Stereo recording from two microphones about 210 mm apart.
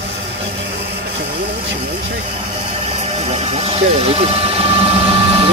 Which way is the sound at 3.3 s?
30° right (ahead or behind).